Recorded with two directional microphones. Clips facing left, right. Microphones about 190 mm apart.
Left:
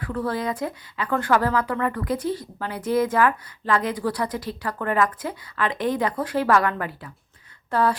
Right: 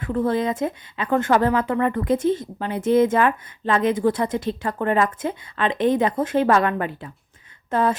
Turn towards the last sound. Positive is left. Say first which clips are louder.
# right 1 dB
turn(degrees=-20)  # may be behind; listen again after turning